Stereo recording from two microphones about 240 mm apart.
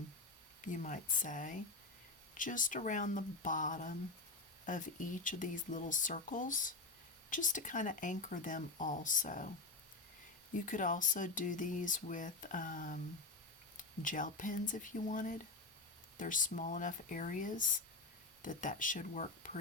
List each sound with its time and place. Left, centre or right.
0.6 s speech: left
10.5 s speech: left